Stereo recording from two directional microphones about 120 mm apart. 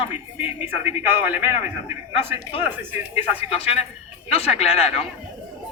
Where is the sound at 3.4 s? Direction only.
55° left (ahead or behind).